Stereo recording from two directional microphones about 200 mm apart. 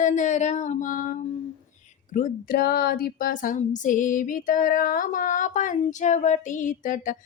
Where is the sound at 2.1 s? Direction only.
45° left (ahead or behind).